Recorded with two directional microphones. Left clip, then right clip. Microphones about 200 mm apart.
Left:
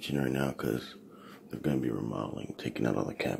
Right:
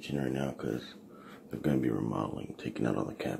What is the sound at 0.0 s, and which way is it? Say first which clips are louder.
Speech: left 3 dB; 15° left (ahead or behind).